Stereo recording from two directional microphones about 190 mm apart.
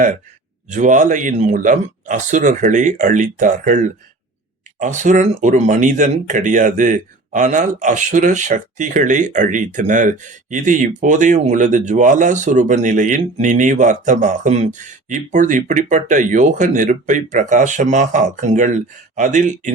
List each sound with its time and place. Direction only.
0.7 s speech: 40° right (ahead or behind)